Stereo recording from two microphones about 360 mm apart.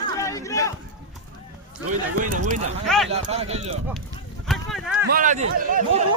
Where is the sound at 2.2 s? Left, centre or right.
Right.